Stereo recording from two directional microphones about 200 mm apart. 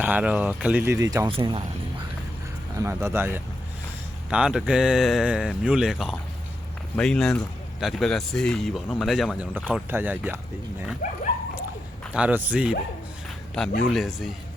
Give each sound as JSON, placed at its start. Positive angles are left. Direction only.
{"t": 0.0, "sound": "speech", "side_deg": -5}
{"t": 1.3, "sound": "speech", "side_deg": -25}
{"t": 2.7, "sound": "speech", "side_deg": -15}
{"t": 9.9, "sound": "speech", "side_deg": -10}
{"t": 12.1, "sound": "speech", "side_deg": -5}